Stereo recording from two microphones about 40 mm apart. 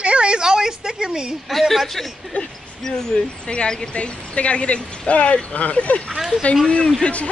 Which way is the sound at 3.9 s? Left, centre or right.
Left.